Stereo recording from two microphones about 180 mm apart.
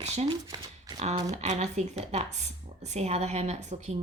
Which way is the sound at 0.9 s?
40° right (ahead or behind).